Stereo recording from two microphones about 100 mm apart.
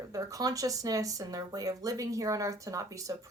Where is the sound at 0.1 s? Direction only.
35° right (ahead or behind).